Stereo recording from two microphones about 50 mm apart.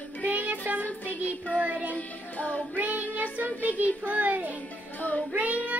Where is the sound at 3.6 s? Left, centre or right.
Right.